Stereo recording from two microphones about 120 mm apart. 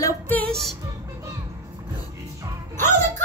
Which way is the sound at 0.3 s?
10° left (ahead or behind).